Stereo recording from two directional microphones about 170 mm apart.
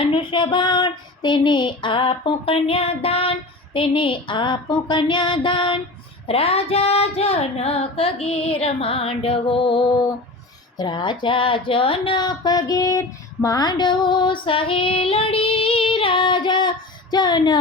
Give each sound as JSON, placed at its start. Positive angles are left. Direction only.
{"t": 0.0, "sound": "speech", "side_deg": 30}
{"t": 6.2, "sound": "female singing", "side_deg": 35}
{"t": 10.8, "sound": "speech", "side_deg": 25}